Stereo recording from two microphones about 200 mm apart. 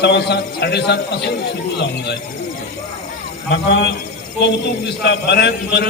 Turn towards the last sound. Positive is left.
turn(degrees=55)  # may be behind; listen again after turning